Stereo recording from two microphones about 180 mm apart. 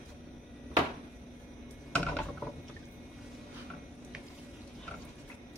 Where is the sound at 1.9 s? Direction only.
5° left (ahead or behind).